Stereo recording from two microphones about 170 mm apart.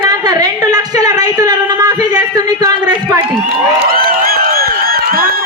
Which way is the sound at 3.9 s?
60° right (ahead or behind).